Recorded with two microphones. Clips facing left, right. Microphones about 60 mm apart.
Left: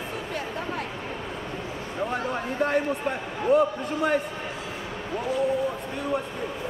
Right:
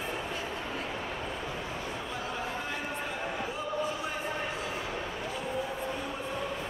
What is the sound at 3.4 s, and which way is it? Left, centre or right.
Speech, left.